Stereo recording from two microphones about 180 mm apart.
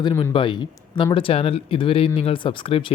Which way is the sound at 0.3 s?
25° left (ahead or behind).